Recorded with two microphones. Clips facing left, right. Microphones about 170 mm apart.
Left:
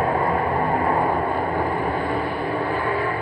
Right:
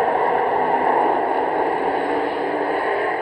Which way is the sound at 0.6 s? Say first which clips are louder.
Right 3 dB; 65° right (ahead or behind).